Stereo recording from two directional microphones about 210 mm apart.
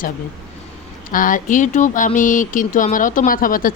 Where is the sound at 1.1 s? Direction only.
40° left (ahead or behind).